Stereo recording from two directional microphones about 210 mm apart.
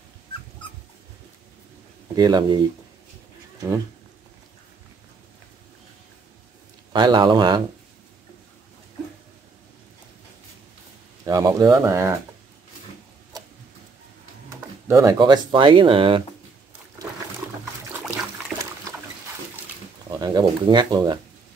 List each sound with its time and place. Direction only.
2.1 s speech: 20° right (ahead or behind)
6.9 s speech: 20° right (ahead or behind)
11.2 s speech: 15° right (ahead or behind)
14.5 s speech: 15° right (ahead or behind)
20.2 s speech: 20° right (ahead or behind)